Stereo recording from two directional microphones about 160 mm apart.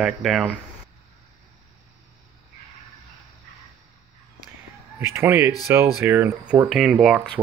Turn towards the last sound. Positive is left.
turn(degrees=0)  # may be behind; listen again after turning